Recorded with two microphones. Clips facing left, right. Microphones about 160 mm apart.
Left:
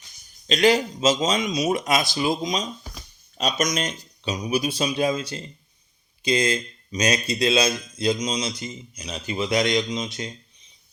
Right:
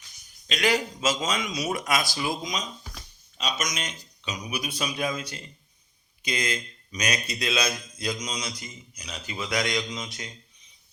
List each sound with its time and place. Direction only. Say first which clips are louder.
0.4 s speech: left 6 dB; 30° left (ahead or behind)
3.3 s speech: left 7 dB; 35° left (ahead or behind)